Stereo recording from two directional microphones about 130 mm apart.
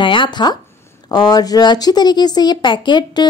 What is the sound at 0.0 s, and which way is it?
Speech, 40° left (ahead or behind).